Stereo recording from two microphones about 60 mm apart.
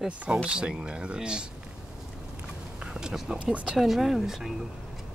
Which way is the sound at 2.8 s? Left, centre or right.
Centre.